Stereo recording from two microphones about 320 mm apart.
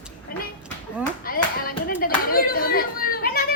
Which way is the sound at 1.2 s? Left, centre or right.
Left.